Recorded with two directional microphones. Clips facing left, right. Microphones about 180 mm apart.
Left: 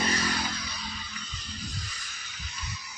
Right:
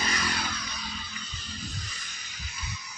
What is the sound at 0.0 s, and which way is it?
Vehicle, 30° left (ahead or behind).